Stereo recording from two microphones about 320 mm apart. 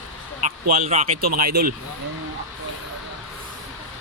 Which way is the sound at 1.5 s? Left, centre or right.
Right.